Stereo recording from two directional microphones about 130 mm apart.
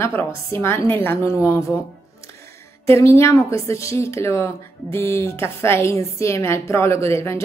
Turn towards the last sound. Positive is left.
turn(degrees=20)  # may be behind; listen again after turning